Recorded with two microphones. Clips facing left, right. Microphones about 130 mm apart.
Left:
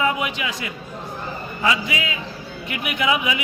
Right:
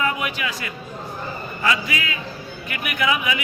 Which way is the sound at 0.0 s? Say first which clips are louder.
Left 2 dB; 20° left (ahead or behind).